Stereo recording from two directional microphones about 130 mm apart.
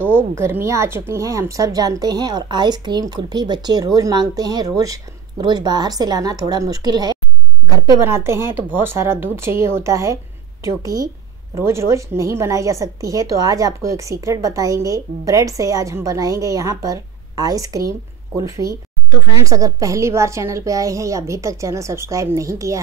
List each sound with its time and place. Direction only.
0.1 s a sound: 20° right (ahead or behind)
0.7 s a woman's voice: 20° right (ahead or behind)
8.0 s a woman's voice: 20° right (ahead or behind)